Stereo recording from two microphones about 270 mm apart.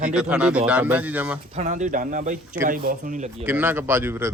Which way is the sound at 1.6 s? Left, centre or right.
Right.